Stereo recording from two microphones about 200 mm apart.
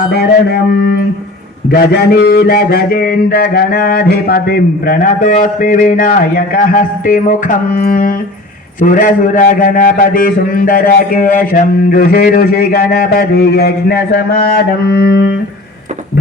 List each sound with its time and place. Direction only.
0.1 s a man's voice: 50° left (ahead or behind)